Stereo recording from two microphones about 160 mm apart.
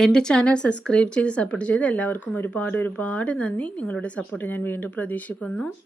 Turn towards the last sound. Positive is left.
turn(degrees=10)  # may be behind; listen again after turning